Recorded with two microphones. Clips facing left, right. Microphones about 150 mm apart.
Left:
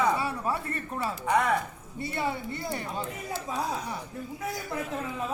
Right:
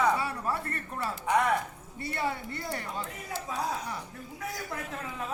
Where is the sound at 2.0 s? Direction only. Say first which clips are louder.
Left 2 dB; 25° left (ahead or behind).